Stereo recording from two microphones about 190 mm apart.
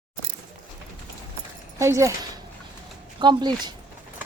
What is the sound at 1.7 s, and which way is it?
Speech, 15° right (ahead or behind).